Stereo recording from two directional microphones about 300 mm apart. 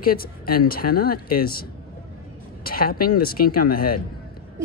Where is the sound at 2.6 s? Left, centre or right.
Left.